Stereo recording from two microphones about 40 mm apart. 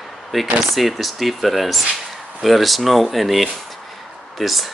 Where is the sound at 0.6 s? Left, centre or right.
Centre.